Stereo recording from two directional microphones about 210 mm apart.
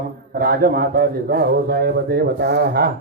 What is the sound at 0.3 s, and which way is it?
A man's voice, 45° right (ahead or behind).